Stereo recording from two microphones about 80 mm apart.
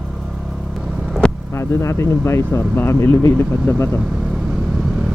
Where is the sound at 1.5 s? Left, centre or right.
Left.